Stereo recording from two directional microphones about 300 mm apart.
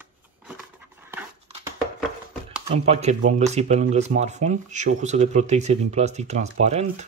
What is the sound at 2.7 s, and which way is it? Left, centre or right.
Speech, right.